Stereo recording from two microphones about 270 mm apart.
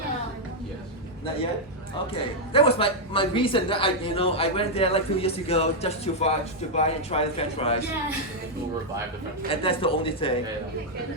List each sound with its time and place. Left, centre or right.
2.1 s a man's voice: left
9.5 s a man's voice: centre